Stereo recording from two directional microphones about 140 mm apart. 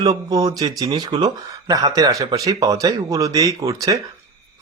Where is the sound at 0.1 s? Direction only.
25° right (ahead or behind).